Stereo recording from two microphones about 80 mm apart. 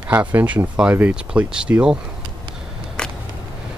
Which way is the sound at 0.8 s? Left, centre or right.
Centre.